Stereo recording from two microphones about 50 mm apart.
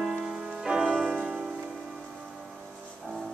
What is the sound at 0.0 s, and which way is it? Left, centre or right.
Music, centre.